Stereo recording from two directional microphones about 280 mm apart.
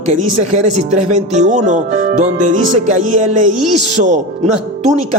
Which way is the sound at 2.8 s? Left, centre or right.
Right.